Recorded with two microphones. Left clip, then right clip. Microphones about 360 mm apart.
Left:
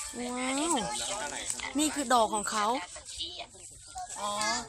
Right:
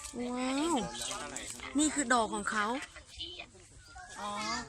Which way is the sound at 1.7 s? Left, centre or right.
Centre.